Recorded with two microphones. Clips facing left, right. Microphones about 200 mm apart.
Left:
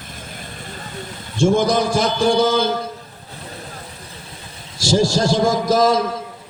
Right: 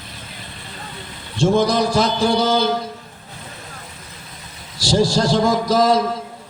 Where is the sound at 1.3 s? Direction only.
50° left (ahead or behind).